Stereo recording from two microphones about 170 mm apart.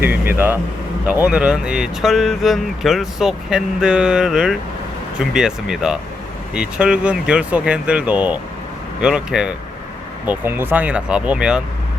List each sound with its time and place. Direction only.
0.0 s speech: 10° right (ahead or behind)